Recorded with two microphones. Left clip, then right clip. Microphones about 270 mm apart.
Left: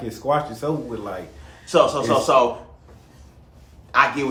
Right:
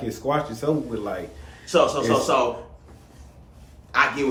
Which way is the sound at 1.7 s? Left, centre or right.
Left.